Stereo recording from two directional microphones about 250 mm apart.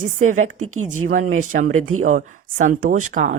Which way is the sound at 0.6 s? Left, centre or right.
Right.